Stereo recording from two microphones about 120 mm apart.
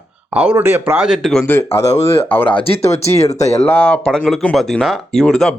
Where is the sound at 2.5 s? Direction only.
55° left (ahead or behind).